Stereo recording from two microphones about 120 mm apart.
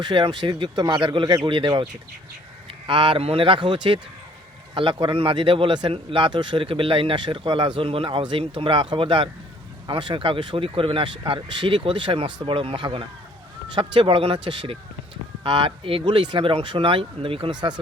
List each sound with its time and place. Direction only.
0.0 s a man's voice: 40° right (ahead or behind)